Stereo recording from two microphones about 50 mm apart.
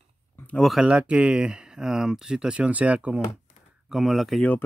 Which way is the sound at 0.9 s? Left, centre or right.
Right.